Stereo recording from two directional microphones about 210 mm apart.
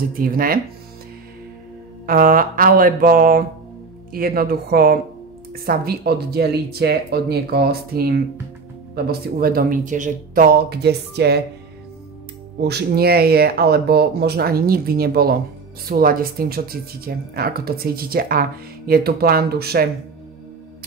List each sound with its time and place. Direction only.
0.1 s speech: 45° right (ahead or behind)
2.0 s mantra: 45° right (ahead or behind)
4.1 s speech: 45° right (ahead or behind)
12.5 s speech: 50° right (ahead or behind)